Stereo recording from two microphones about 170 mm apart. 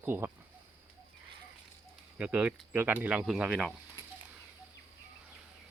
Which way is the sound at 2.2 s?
10° right (ahead or behind).